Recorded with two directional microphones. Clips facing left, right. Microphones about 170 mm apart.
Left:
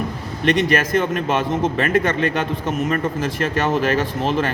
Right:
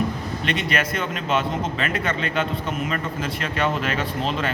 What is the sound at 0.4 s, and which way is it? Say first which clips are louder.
A man's voice: left 8 dB; 45° left (ahead or behind).